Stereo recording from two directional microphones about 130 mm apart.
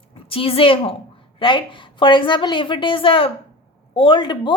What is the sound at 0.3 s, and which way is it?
A woman's voice, 45° left (ahead or behind).